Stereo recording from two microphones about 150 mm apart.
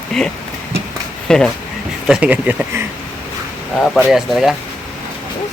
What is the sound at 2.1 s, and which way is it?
Speech, 10° right (ahead or behind).